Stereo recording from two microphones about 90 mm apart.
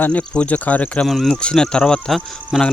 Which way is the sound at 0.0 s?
15° left (ahead or behind).